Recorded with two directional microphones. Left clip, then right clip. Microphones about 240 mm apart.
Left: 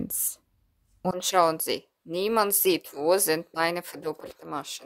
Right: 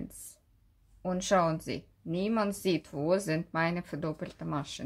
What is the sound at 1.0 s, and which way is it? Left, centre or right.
Speech, left.